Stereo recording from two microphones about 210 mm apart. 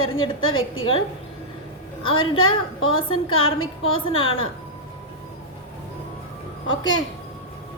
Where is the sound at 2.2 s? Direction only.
75° left (ahead or behind).